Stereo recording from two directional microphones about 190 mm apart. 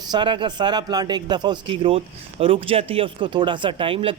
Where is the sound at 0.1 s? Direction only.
25° right (ahead or behind).